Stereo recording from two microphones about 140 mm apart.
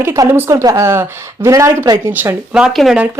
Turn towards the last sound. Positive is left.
turn(degrees=-5)  # may be behind; listen again after turning